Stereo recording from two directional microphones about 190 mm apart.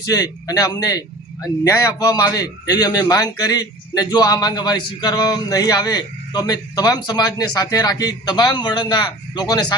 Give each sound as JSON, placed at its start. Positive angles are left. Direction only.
{"t": 0.0, "sound": "a man's voice", "side_deg": 20}